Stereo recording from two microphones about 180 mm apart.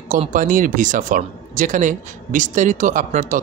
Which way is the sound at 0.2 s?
45° right (ahead or behind).